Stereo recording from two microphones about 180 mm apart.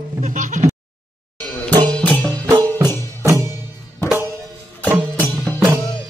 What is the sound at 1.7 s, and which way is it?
Music, 25° right (ahead or behind).